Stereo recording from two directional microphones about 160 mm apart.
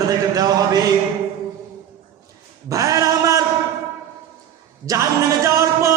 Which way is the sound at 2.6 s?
20° right (ahead or behind).